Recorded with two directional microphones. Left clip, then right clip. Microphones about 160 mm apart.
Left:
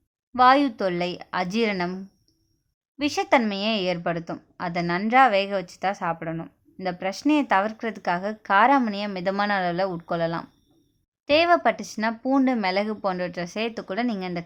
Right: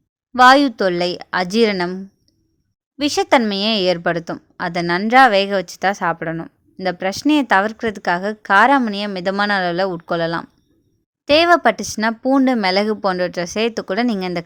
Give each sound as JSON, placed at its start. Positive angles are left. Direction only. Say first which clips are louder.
{"t": 0.3, "sound": "a woman's voice", "louder": "right 7 dB", "side_deg": -35}